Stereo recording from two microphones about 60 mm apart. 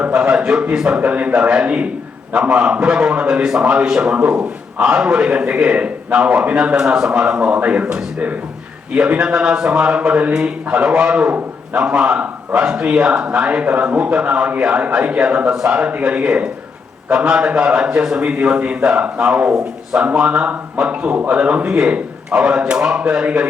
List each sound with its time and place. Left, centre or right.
0.2 s a sound: centre
0.7 s speech: centre
0.9 s a man's voice: right
1.6 s a man's voice: right
6.7 s a man's voice: centre